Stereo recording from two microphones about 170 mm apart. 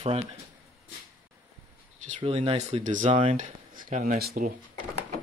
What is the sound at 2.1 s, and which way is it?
Speech, 35° right (ahead or behind).